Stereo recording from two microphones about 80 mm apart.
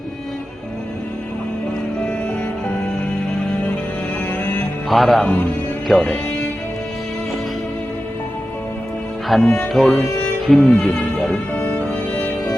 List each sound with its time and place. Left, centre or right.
4.9 s music: centre
9.3 s music: centre
10.4 s speech: centre
11.5 s music: centre